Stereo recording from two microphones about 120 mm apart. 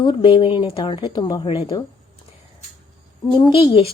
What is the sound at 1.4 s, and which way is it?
Speech, 55° left (ahead or behind).